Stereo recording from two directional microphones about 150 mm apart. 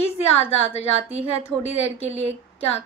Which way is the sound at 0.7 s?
45° left (ahead or behind).